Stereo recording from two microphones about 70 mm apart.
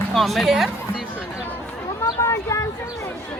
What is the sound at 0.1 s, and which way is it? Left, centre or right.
Speech, centre.